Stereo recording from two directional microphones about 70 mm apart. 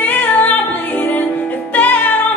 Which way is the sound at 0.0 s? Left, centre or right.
Left.